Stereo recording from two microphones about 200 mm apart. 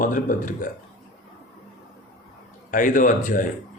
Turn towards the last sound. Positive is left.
turn(degrees=40)  # may be behind; listen again after turning